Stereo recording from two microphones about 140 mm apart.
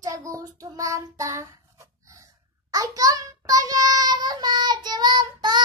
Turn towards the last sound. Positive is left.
turn(degrees=-30)  # may be behind; listen again after turning